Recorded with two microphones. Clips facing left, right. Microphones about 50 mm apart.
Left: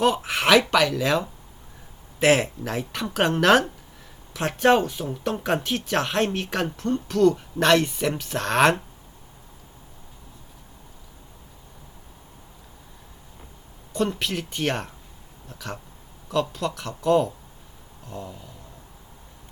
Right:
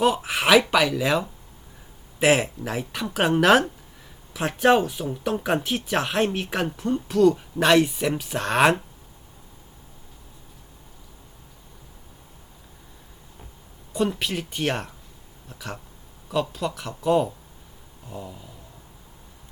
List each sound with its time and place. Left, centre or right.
0.0 s speech: centre
13.9 s speech: centre
18.0 s a sound: centre